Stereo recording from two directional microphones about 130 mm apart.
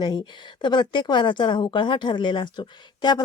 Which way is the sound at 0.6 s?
35° left (ahead or behind).